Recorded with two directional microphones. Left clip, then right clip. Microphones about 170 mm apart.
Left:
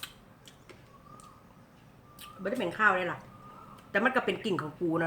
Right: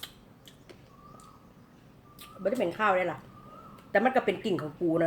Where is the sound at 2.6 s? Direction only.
15° left (ahead or behind).